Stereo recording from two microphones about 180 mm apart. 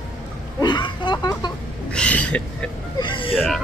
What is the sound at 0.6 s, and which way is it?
Speech, 25° left (ahead or behind).